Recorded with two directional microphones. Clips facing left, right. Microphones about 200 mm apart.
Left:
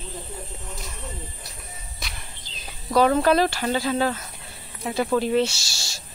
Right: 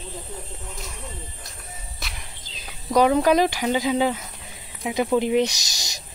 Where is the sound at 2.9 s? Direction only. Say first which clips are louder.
Right 1 dB; 15° right (ahead or behind).